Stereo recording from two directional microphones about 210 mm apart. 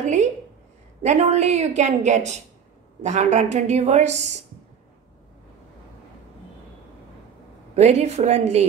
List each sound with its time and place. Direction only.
0.0 s speech: 35° right (ahead or behind)
7.7 s speech: 30° right (ahead or behind)